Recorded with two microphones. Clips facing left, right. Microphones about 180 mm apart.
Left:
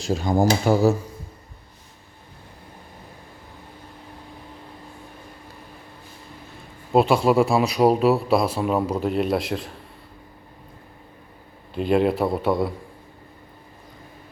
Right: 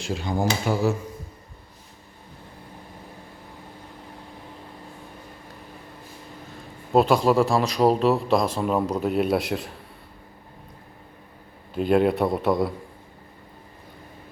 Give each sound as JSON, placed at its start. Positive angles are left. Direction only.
{"t": 0.0, "sound": "speech", "side_deg": 40}
{"t": 6.9, "sound": "speech", "side_deg": 5}
{"t": 11.7, "sound": "speech", "side_deg": 0}